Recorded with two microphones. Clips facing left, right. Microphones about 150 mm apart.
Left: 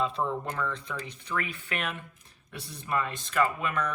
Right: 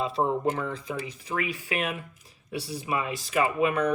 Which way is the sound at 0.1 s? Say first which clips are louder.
Right 6 dB; 35° right (ahead or behind).